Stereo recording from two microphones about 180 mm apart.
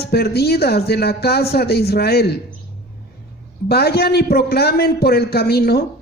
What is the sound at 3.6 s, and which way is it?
A man's voice, 60° left (ahead or behind).